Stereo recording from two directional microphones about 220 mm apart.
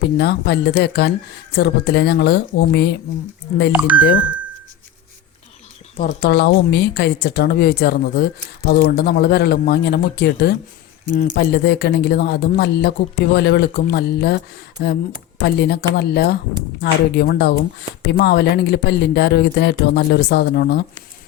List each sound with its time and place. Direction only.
0.2 s speech: 50° left (ahead or behind)
3.9 s speech: 5° right (ahead or behind)
6.0 s speech: 40° left (ahead or behind)